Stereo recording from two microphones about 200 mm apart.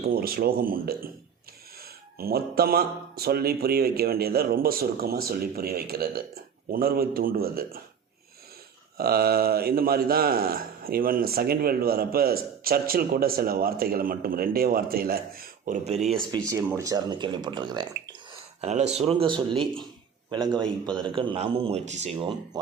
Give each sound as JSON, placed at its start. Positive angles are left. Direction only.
{"t": 0.0, "sound": "a man's voice", "side_deg": -50}
{"t": 2.1, "sound": "a man's voice", "side_deg": -50}
{"t": 9.0, "sound": "a man's voice", "side_deg": -50}
{"t": 16.5, "sound": "speech", "side_deg": -15}
{"t": 18.6, "sound": "speech", "side_deg": -35}